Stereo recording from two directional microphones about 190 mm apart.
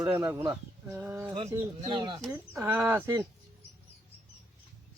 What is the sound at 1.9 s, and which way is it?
Speech, 25° right (ahead or behind).